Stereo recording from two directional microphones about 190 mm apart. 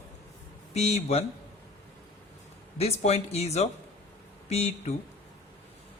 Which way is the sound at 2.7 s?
35° left (ahead or behind).